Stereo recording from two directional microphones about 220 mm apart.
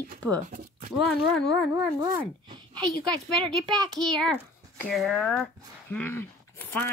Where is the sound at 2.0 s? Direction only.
20° right (ahead or behind).